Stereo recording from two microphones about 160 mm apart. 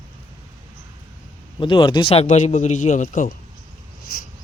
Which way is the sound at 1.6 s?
30° left (ahead or behind).